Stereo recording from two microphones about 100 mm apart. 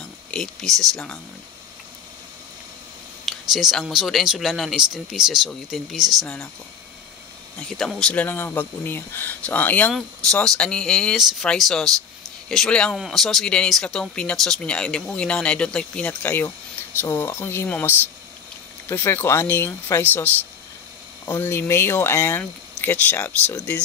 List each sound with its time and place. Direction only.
0.0 s speech: 5° left (ahead or behind)
3.5 s speech: 5° right (ahead or behind)
6.2 s speech: 15° left (ahead or behind)
7.5 s speech: 5° left (ahead or behind)
9.9 s speech: 5° left (ahead or behind); by 20.2 s 20° left (ahead or behind)
21.3 s speech: 25° left (ahead or behind)